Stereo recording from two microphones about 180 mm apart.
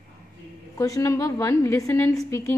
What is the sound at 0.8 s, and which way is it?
A woman's voice, 20° left (ahead or behind).